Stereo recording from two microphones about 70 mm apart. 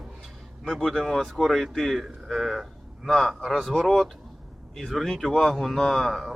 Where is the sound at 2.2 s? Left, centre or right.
Centre.